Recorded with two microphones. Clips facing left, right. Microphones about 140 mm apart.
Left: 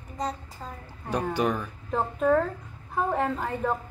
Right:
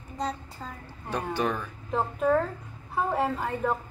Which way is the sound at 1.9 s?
Centre (ahead or behind).